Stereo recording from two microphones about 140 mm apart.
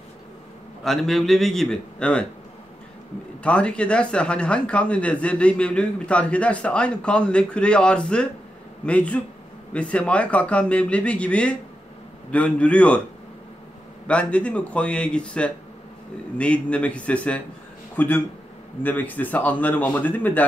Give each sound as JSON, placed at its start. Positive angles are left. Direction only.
{"t": 0.8, "sound": "a man's voice", "side_deg": 0}
{"t": 3.4, "sound": "speech", "side_deg": 10}
{"t": 14.0, "sound": "a man's voice", "side_deg": 10}